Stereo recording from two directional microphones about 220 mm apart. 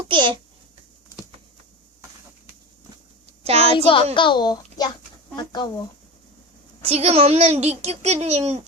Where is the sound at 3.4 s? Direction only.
30° right (ahead or behind).